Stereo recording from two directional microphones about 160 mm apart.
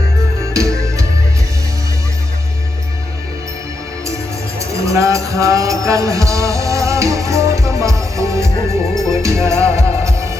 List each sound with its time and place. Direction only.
0.5 s music: 20° right (ahead or behind)
4.6 s music: 20° right (ahead or behind)